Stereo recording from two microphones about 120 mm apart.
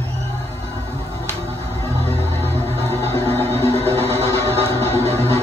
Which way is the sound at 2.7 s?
60° right (ahead or behind).